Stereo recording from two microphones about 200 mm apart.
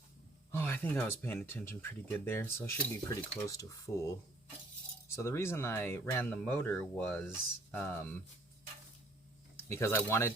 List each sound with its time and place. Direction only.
0.5 s speech: 10° left (ahead or behind)
9.6 s speech: 10° left (ahead or behind)